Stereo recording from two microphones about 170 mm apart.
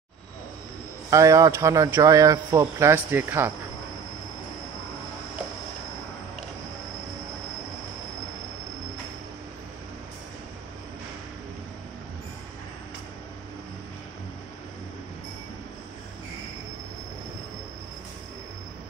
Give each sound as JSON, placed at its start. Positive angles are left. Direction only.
{"t": 1.1, "sound": "speech", "side_deg": -20}